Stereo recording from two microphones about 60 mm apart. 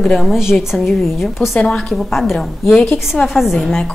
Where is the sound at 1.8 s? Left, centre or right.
Centre.